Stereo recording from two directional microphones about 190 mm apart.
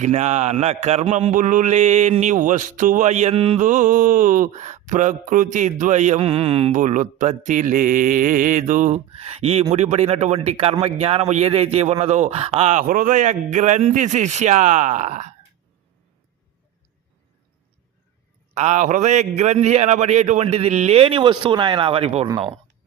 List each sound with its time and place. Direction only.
0.0 s speech: 40° right (ahead or behind)
18.5 s speech: 40° right (ahead or behind)